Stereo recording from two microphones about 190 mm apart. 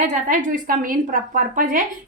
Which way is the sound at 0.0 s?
40° right (ahead or behind).